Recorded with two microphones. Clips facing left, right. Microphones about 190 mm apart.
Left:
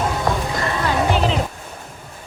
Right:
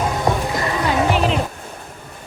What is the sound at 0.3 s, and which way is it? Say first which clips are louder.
Clip-clop: right 2 dB; 20° right (ahead or behind).